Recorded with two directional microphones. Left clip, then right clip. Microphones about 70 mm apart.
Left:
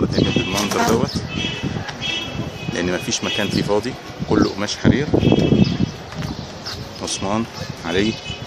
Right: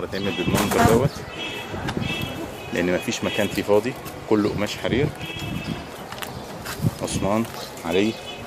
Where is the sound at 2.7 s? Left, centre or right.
Centre.